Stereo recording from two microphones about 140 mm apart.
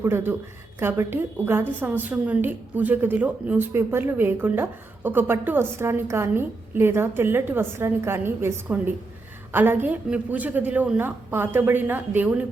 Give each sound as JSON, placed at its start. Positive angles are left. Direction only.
{"t": 0.0, "sound": "a woman's voice", "side_deg": -15}